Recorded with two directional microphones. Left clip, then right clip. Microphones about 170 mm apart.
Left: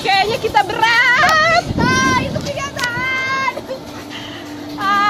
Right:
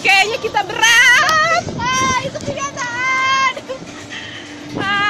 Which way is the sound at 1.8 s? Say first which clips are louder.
Left 2 dB; 65° right (ahead or behind).